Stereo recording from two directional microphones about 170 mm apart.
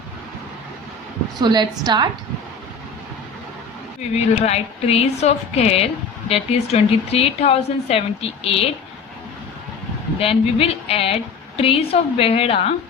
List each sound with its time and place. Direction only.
1.4 s a woman's voice: 25° right (ahead or behind)
4.4 s a woman's voice: 35° left (ahead or behind)
10.2 s a woman's voice: 35° left (ahead or behind)